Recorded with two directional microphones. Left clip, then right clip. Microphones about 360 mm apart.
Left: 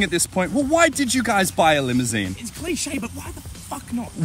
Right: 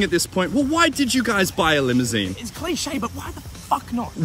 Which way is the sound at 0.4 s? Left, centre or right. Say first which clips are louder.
Left 2 dB; centre.